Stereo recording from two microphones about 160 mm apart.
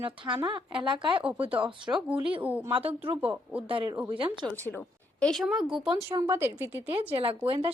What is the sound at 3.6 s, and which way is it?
Speech, 30° right (ahead or behind).